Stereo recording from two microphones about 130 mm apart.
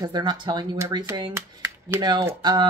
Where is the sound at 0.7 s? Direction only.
20° right (ahead or behind).